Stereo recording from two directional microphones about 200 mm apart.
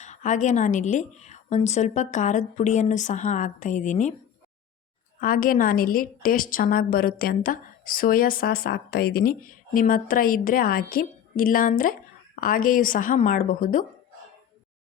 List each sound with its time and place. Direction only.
0.0 s a woman's voice: 35° left (ahead or behind)
5.2 s a woman's voice: 45° left (ahead or behind)